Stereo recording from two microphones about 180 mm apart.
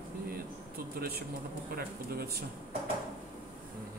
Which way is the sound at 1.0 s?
60° right (ahead or behind).